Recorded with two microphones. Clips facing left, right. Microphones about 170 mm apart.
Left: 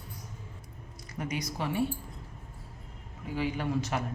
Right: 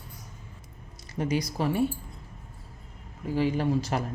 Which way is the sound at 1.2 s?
30° right (ahead or behind).